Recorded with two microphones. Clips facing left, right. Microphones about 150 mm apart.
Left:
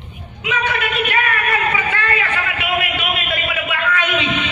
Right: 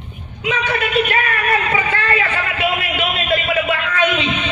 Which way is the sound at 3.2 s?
35° right (ahead or behind).